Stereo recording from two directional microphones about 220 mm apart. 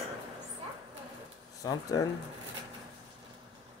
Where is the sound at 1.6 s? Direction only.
15° left (ahead or behind).